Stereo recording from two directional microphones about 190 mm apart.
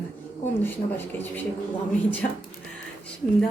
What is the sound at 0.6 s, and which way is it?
Speech, 10° left (ahead or behind).